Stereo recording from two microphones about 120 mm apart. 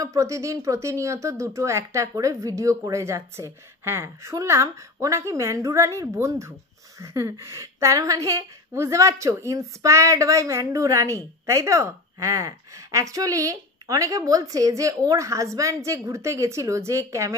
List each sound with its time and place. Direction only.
0.0 s a woman's voice: 25° right (ahead or behind)